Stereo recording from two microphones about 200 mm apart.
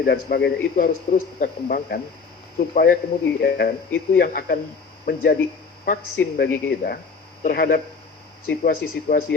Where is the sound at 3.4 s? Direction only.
50° left (ahead or behind).